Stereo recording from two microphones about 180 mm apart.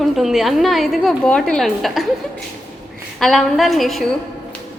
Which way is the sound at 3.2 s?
Centre (ahead or behind).